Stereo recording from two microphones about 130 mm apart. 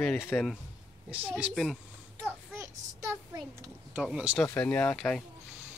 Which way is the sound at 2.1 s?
20° right (ahead or behind).